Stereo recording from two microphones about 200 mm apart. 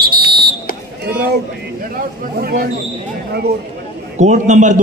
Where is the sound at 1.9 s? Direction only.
45° right (ahead or behind).